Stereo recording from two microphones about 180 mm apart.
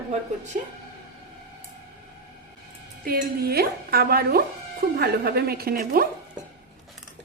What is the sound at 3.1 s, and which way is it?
Speech, 60° right (ahead or behind).